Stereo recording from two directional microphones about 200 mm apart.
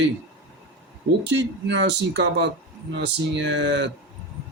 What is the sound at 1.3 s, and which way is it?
Speech, 60° right (ahead or behind).